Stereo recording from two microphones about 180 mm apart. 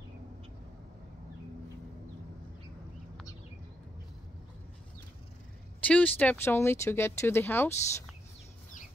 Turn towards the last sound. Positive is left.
turn(degrees=10)  # may be behind; listen again after turning